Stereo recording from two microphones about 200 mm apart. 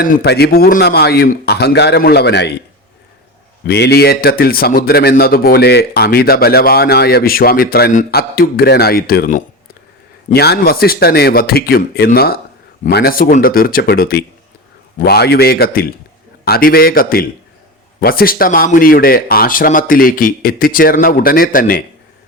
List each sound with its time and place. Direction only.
0.0 s speech: 45° left (ahead or behind)
3.7 s speech: 55° left (ahead or behind)